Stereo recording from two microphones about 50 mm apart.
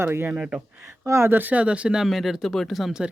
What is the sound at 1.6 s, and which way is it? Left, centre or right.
Speech, right.